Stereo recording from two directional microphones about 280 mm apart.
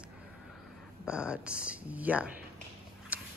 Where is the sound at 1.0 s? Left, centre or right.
Centre.